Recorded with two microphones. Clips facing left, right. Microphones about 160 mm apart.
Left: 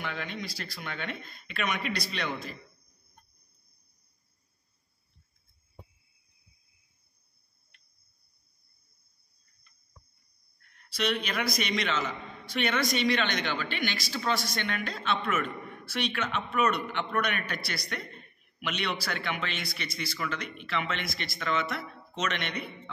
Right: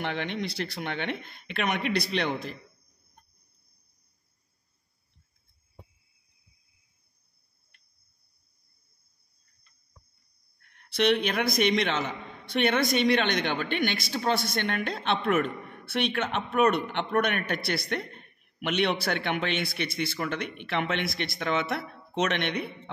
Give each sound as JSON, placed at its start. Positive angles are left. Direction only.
{"t": 0.0, "sound": "a man's voice", "side_deg": -65}
{"t": 10.6, "sound": "a man's voice", "side_deg": -60}